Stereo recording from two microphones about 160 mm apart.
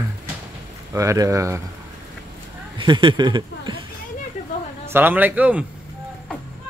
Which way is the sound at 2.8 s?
30° right (ahead or behind).